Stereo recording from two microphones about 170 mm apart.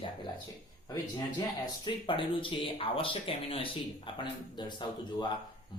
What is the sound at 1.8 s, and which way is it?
A man's voice, 30° left (ahead or behind).